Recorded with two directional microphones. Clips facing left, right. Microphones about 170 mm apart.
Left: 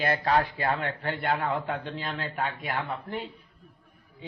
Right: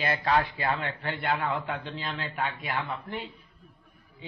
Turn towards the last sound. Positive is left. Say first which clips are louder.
# left 2 dB
turn(degrees=40)  # may be behind; listen again after turning